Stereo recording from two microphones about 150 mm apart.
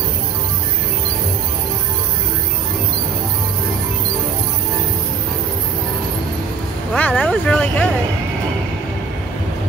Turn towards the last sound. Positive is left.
turn(degrees=5)  # may be behind; listen again after turning